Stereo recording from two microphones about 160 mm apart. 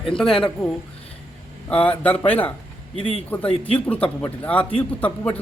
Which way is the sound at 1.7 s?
10° left (ahead or behind).